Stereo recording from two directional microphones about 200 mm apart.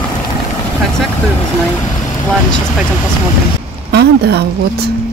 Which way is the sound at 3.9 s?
55° right (ahead or behind).